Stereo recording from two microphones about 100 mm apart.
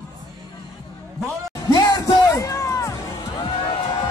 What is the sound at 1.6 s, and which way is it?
Music, 35° left (ahead or behind).